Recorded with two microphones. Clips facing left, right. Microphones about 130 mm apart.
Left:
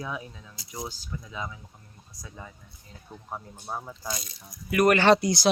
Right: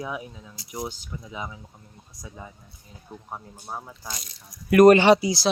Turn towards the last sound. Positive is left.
turn(degrees=0)  # may be behind; listen again after turning